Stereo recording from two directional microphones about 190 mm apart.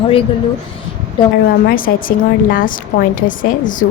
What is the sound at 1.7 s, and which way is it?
A woman's voice, 50° left (ahead or behind).